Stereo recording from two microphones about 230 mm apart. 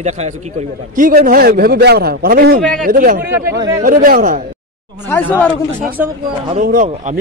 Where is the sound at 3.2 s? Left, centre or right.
Centre.